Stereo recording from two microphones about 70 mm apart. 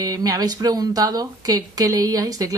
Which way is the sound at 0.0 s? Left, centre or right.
Right.